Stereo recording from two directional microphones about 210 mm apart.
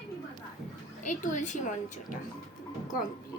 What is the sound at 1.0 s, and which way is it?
A woman's voice, 35° left (ahead or behind).